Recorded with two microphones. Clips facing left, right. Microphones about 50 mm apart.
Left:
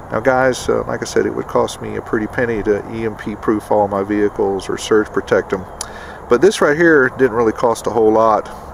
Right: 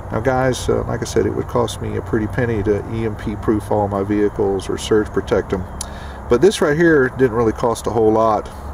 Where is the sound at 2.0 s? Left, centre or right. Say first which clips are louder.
Left 2 dB; centre.